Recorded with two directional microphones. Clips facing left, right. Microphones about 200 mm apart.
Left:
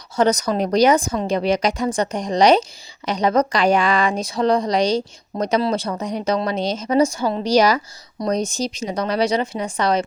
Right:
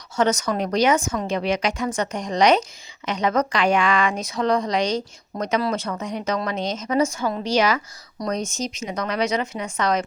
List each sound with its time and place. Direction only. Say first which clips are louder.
0.2 s speech: left 3 dB; 35° left (ahead or behind)